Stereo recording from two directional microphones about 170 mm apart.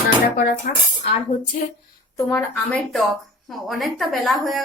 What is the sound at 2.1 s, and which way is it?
A woman's voice, 15° left (ahead or behind).